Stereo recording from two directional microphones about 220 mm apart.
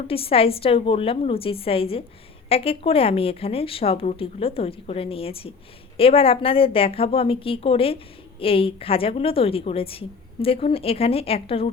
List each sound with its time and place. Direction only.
0.1 s a woman's voice: 25° left (ahead or behind)